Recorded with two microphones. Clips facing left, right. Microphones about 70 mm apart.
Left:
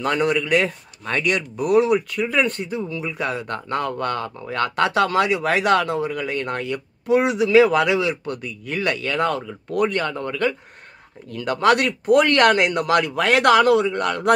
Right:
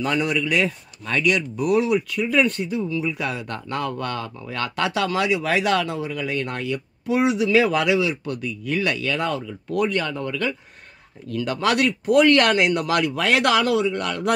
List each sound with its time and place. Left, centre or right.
0.0 s speech: left